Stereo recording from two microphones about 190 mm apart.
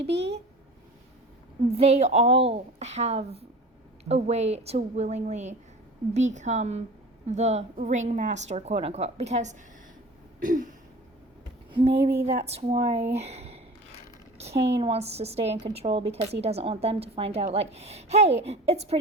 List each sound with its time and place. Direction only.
0.1 s a sound: 65° right (ahead or behind)
1.6 s speech: 30° right (ahead or behind)
10.4 s throat clearing: 45° right (ahead or behind)
11.7 s a woman's voice: 30° right (ahead or behind)